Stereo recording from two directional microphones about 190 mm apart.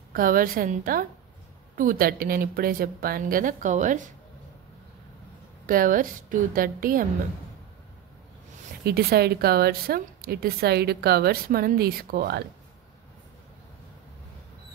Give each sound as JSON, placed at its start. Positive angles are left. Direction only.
{"t": 0.1, "sound": "a woman's voice", "side_deg": -45}
{"t": 5.7, "sound": "a woman's voice", "side_deg": -45}
{"t": 8.8, "sound": "a woman's voice", "side_deg": -55}